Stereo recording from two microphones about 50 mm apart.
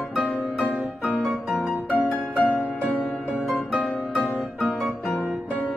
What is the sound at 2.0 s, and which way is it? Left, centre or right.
Music, left.